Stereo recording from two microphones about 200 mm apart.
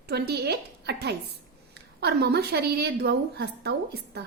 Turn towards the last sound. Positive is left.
turn(degrees=-55)  # may be behind; listen again after turning